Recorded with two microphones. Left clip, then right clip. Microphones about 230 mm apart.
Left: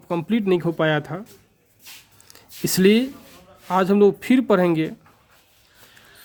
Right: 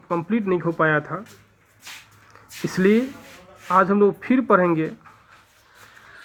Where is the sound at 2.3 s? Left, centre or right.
Left.